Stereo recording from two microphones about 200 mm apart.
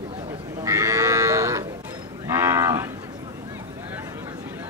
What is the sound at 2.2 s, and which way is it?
Moo, 10° right (ahead or behind).